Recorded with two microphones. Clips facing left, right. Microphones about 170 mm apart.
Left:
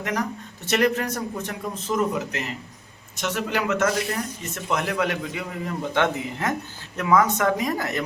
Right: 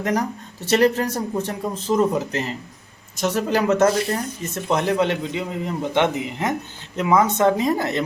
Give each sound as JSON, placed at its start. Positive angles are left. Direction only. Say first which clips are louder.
{"t": 0.0, "sound": "speech", "louder": "right 4 dB", "side_deg": -35}